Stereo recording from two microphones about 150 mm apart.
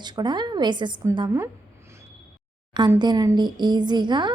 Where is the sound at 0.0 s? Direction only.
30° right (ahead or behind).